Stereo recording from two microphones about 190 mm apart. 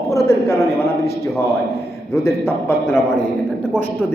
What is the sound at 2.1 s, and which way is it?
A man's voice, 15° left (ahead or behind).